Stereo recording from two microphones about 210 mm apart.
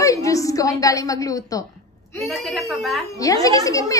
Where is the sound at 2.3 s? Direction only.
Centre (ahead or behind).